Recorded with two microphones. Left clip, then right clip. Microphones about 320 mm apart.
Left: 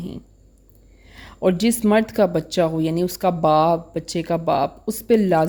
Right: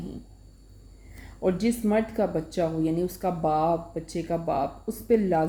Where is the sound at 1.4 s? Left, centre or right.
Left.